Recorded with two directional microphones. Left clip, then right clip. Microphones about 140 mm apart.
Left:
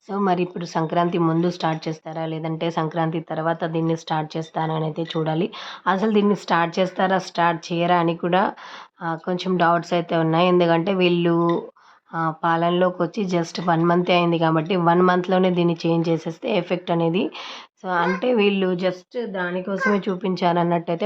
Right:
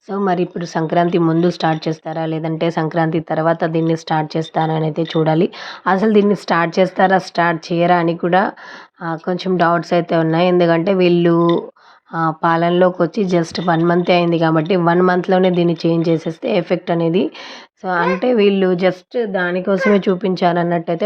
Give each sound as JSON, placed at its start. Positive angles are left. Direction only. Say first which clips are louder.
{"t": 0.3, "sound": "a woman's voice", "louder": "right 4 dB", "side_deg": -20}
{"t": 12.1, "sound": "a woman's voice", "louder": "right 5 dB", "side_deg": -30}
{"t": 18.8, "sound": "a woman's voice", "louder": "right 8 dB", "side_deg": -40}